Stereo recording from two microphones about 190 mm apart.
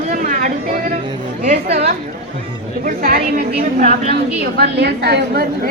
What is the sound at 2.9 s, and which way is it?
A woman's voice, 50° right (ahead or behind).